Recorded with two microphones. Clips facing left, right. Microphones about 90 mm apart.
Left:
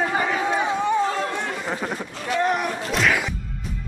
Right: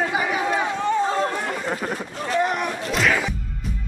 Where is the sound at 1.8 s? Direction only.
Centre (ahead or behind).